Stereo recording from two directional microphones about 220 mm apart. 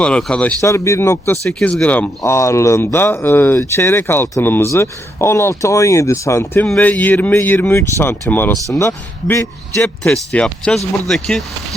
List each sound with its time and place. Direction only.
0.0 s speech: 5° left (ahead or behind)
1.5 s a man's voice: centre (ahead or behind)